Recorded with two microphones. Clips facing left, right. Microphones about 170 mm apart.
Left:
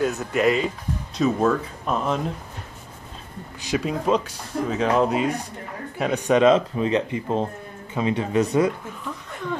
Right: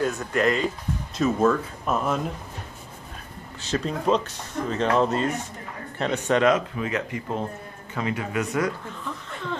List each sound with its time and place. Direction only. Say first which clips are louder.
0.0 s speech: left 2 dB; centre (ahead or behind)
3.6 s speech: left 1 dB; 10° left (ahead or behind); by 8.7 s 25° left (ahead or behind)